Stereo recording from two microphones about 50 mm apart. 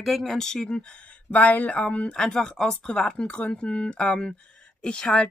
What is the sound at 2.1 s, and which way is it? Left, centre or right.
Speech, centre.